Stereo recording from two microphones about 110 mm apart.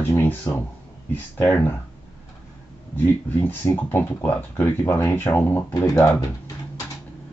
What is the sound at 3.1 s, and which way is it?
Speech, 20° left (ahead or behind).